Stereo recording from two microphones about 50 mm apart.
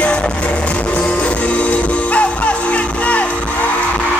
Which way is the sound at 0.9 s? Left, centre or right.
Left.